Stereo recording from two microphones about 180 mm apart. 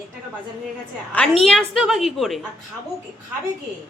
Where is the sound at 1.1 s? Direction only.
5° left (ahead or behind).